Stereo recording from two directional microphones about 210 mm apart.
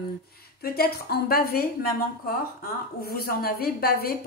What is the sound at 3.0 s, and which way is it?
Speech, 45° left (ahead or behind).